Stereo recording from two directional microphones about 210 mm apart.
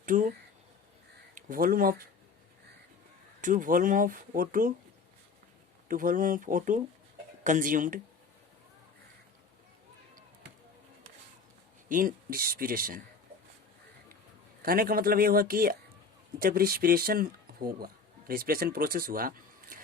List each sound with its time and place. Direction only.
0.0 s speech: 40° right (ahead or behind)
1.4 s speech: 40° right (ahead or behind)
3.4 s speech: 40° right (ahead or behind)
5.9 s speech: 40° right (ahead or behind)
11.9 s speech: 40° right (ahead or behind)
14.6 s speech: 45° right (ahead or behind)